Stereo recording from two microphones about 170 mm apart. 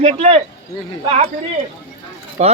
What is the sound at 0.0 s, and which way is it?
Speech, 35° right (ahead or behind).